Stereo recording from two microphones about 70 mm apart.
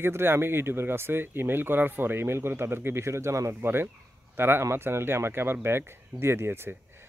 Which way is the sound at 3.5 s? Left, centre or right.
Right.